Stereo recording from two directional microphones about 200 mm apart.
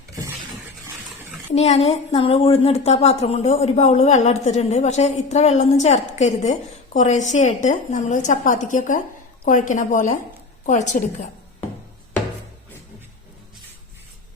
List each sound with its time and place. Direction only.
1.5 s a woman's voice: 35° left (ahead or behind)